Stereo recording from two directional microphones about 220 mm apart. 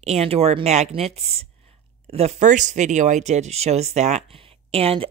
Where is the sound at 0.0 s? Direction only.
30° right (ahead or behind).